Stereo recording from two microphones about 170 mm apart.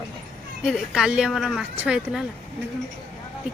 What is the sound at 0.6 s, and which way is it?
Speech, centre (ahead or behind).